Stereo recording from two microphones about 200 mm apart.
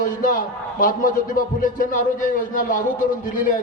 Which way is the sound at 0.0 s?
40° left (ahead or behind).